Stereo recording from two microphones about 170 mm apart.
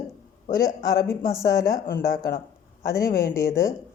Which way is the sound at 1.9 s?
60° left (ahead or behind).